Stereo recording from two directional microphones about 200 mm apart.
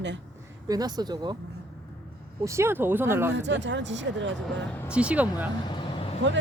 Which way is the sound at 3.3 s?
60° right (ahead or behind).